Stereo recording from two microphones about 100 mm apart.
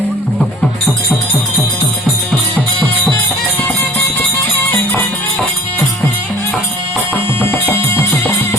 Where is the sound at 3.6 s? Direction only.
5° left (ahead or behind).